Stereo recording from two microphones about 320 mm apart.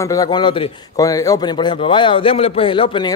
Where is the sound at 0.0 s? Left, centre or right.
Centre.